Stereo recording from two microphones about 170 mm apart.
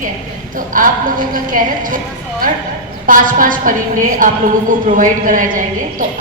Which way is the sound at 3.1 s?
50° right (ahead or behind).